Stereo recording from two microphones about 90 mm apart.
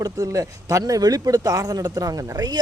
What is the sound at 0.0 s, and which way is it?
Speech, 40° right (ahead or behind).